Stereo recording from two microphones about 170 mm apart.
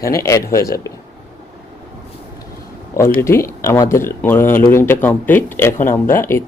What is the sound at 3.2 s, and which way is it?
Speech, 15° left (ahead or behind).